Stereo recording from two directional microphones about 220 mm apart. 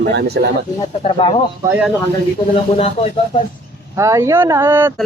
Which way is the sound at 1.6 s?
10° right (ahead or behind).